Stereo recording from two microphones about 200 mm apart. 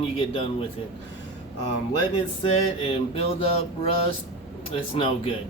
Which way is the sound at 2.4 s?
30° left (ahead or behind).